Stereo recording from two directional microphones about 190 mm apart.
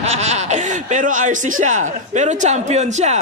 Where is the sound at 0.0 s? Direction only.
35° right (ahead or behind).